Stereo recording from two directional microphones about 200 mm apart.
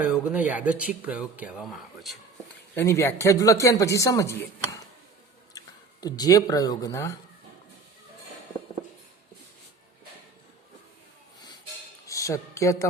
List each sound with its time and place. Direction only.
0.0 s speech: 5° right (ahead or behind)
2.7 s speech: 15° left (ahead or behind)
12.0 s a sound: 15° left (ahead or behind)